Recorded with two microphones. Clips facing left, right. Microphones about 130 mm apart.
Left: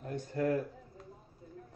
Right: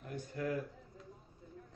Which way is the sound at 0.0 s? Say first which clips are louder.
Left 6 dB; 40° left (ahead or behind).